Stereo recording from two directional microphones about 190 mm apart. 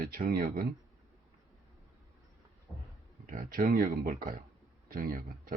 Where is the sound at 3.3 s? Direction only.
45° right (ahead or behind).